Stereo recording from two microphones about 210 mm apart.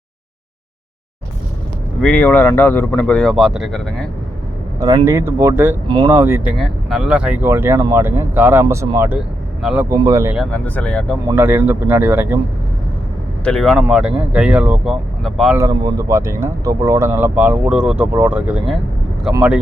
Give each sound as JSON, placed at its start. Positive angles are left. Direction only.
{"t": 2.0, "sound": "speech", "side_deg": 5}
{"t": 5.0, "sound": "speech", "side_deg": -15}
{"t": 9.9, "sound": "speech", "side_deg": -15}
{"t": 10.3, "sound": "speech", "side_deg": 5}
{"t": 11.3, "sound": "speech", "side_deg": -10}
{"t": 13.4, "sound": "speech", "side_deg": 5}
{"t": 15.5, "sound": "speech", "side_deg": -15}